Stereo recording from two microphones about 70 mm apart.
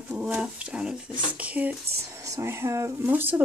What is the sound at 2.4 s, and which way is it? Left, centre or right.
Speech, right.